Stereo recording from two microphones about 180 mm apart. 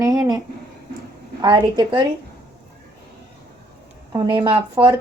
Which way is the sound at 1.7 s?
25° right (ahead or behind).